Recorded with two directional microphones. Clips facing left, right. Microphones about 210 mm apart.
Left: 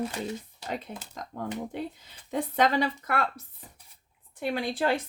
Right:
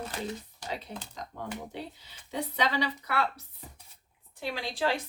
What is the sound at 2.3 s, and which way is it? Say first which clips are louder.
Speech: left 5 dB; 50° left (ahead or behind).